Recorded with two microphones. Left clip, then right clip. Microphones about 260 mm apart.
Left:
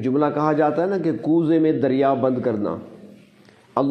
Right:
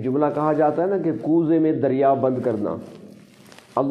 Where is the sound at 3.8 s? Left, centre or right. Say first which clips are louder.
Left 1 dB; left.